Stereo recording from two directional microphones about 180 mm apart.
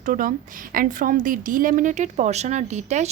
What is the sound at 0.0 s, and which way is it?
A woman's voice, 50° right (ahead or behind).